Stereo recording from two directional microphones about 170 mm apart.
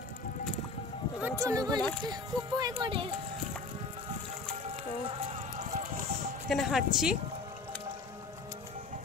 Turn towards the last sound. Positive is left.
turn(degrees=-5)  # may be behind; listen again after turning